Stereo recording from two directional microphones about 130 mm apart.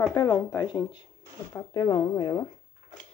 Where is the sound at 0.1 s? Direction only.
30° left (ahead or behind).